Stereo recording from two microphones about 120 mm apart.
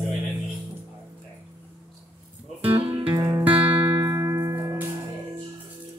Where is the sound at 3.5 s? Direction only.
15° right (ahead or behind).